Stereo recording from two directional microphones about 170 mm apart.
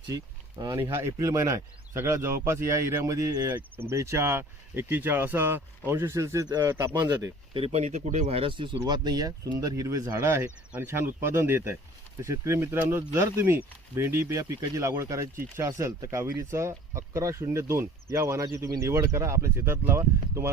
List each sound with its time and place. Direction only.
0.1 s speech: 20° right (ahead or behind)
7.6 s speech: 40° right (ahead or behind); by 20.5 s 15° right (ahead or behind)